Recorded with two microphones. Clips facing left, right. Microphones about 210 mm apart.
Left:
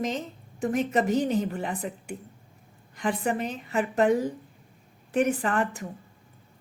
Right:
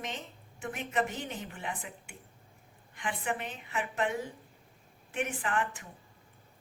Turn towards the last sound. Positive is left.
turn(degrees=40)  # may be behind; listen again after turning